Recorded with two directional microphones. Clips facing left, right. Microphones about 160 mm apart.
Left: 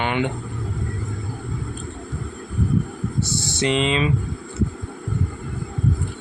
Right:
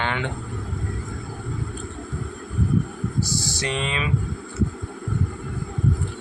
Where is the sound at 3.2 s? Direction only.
25° left (ahead or behind).